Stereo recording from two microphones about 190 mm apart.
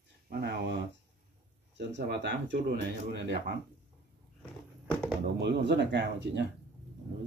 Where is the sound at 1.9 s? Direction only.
65° right (ahead or behind).